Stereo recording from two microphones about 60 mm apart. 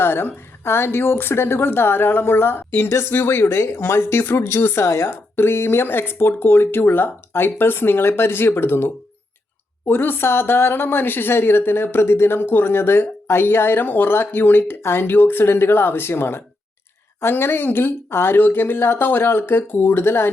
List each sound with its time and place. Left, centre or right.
0.0 s speech: left